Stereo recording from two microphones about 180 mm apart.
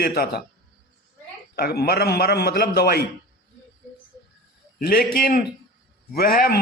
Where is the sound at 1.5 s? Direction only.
60° left (ahead or behind).